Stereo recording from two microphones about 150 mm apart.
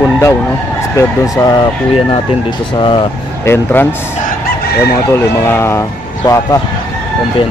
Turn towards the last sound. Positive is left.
turn(degrees=20)  # may be behind; listen again after turning